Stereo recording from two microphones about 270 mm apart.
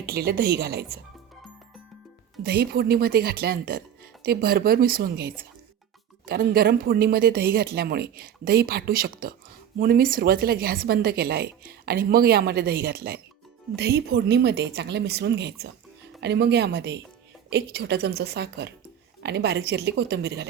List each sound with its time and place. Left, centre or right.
0.0 s a woman's voice: right
2.4 s a woman's voice: right